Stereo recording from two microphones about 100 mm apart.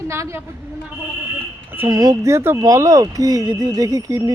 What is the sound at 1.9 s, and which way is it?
Speech, 40° right (ahead or behind).